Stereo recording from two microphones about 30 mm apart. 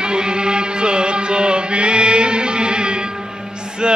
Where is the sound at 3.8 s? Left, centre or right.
Right.